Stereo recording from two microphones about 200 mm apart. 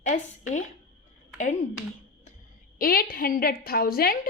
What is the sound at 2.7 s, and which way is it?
A woman's voice, 45° left (ahead or behind).